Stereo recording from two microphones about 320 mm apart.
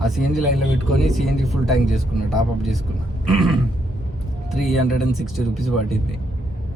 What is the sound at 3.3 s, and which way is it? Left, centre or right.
A man's voice, centre.